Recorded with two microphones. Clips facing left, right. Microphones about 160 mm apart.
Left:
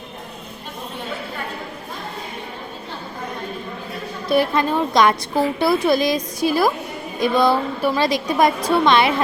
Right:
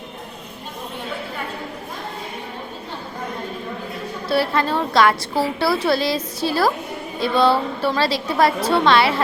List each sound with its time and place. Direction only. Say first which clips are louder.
4.3 s a woman's voice: left 2 dB; 15° left (ahead or behind)